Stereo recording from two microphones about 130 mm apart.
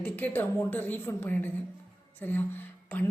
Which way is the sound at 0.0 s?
15° left (ahead or behind).